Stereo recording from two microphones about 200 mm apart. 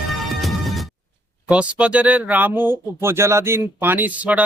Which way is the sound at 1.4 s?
5° right (ahead or behind).